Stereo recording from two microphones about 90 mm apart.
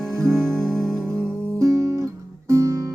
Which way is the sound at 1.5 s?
35° right (ahead or behind).